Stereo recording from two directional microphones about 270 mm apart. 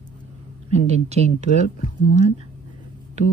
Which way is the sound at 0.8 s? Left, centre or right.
Right.